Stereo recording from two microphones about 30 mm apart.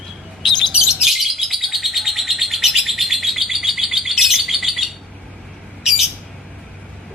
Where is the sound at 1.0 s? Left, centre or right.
Centre.